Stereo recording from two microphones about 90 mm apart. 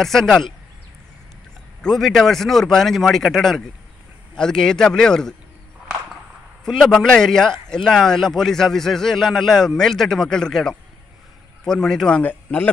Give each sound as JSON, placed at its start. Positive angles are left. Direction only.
{"t": 0.0, "sound": "speech", "side_deg": 5}
{"t": 1.8, "sound": "a man's voice", "side_deg": 5}
{"t": 6.6, "sound": "a man's voice", "side_deg": 5}
{"t": 12.2, "sound": "speech", "side_deg": 20}